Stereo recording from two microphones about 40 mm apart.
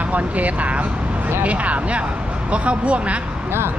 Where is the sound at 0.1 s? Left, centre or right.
Right.